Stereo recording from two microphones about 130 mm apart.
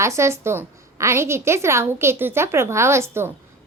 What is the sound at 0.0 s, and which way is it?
A woman's voice, 20° right (ahead or behind).